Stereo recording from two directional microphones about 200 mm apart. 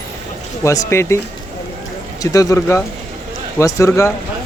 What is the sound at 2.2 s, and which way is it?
Speech, 15° left (ahead or behind).